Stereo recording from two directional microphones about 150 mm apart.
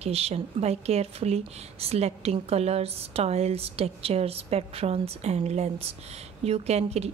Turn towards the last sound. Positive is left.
turn(degrees=-45)  # may be behind; listen again after turning